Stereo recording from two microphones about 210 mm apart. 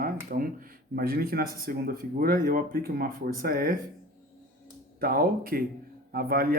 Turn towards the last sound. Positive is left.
turn(degrees=-45)  # may be behind; listen again after turning